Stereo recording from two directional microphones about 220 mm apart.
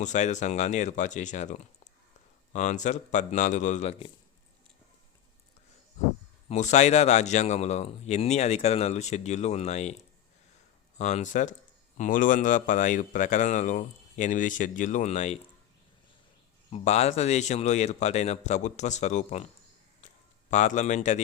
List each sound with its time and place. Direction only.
0.0 s speech: 35° left (ahead or behind)
6.5 s speech: 30° left (ahead or behind)
10.9 s speech: 30° left (ahead or behind)
16.7 s speech: 30° left (ahead or behind)
20.5 s speech: 30° left (ahead or behind)